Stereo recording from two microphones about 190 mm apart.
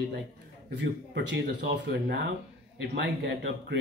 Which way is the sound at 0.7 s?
65° right (ahead or behind).